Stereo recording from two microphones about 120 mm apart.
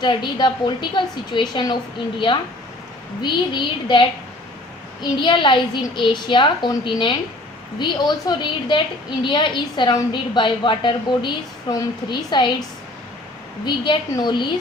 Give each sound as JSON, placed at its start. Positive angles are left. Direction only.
{"t": 0.0, "sound": "a woman's voice", "side_deg": 40}
{"t": 5.2, "sound": "a woman's voice", "side_deg": 40}
{"t": 13.7, "sound": "a woman's voice", "side_deg": 40}